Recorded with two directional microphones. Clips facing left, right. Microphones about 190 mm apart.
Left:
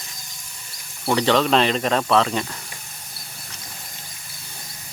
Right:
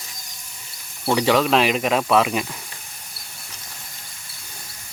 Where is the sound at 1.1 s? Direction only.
10° right (ahead or behind).